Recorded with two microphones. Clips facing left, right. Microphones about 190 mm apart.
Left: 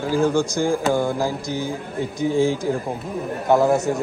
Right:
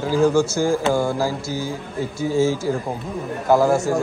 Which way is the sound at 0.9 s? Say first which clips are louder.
Right 1 dB; 15° left (ahead or behind).